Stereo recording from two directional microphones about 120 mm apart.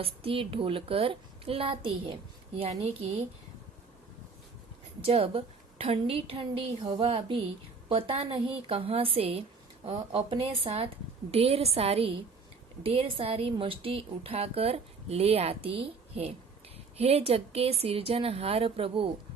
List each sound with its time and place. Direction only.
0.0 s a woman's voice: 50° right (ahead or behind)
2.6 s a woman's voice: 60° right (ahead or behind)
5.0 s a woman's voice: 50° right (ahead or behind)